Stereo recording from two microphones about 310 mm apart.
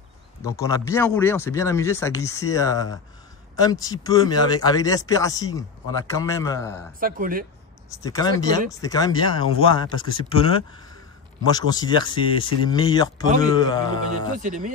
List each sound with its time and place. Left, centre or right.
0.4 s speech: centre
7.0 s speech: right
8.0 s speech: centre
14.3 s speech: right